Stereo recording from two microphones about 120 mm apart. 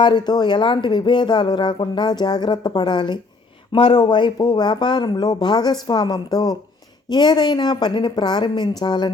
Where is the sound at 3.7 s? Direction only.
50° left (ahead or behind).